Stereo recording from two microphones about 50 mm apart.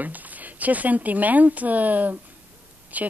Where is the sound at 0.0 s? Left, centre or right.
Right.